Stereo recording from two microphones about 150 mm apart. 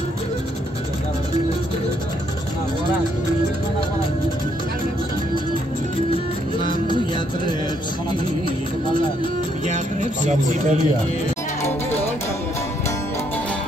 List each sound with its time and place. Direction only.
9.7 s a man's voice: 55° right (ahead or behind)